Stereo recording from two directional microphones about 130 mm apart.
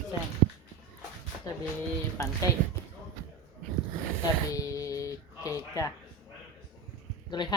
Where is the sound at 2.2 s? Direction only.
20° left (ahead or behind).